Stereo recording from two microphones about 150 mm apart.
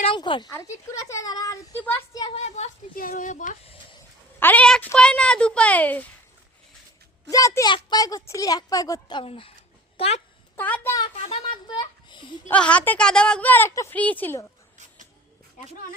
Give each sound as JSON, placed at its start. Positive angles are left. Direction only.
{"t": 0.0, "sound": "speech", "side_deg": 35}
{"t": 0.5, "sound": "speech", "side_deg": 20}
{"t": 2.3, "sound": "speech", "side_deg": 45}
{"t": 2.9, "sound": "speech", "side_deg": 70}
{"t": 4.4, "sound": "a woman's voice", "side_deg": 10}
{"t": 7.3, "sound": "a child's voice", "side_deg": 20}
{"t": 10.6, "sound": "a woman's voice", "side_deg": 10}
{"t": 11.2, "sound": "a woman's voice", "side_deg": 40}
{"t": 12.5, "sound": "a woman's voice", "side_deg": 10}